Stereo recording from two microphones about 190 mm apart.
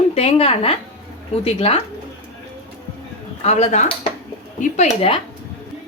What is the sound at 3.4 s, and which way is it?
Speech, 35° left (ahead or behind).